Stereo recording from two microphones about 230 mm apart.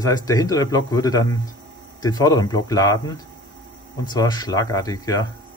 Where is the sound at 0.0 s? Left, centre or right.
Centre.